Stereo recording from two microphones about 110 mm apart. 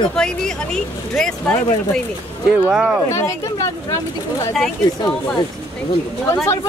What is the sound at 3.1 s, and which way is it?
Speech, 30° left (ahead or behind).